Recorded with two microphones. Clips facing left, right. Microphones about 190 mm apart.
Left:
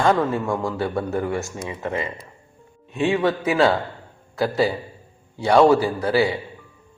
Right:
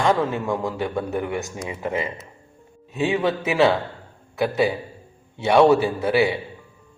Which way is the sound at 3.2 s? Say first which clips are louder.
Right 1 dB; 25° right (ahead or behind).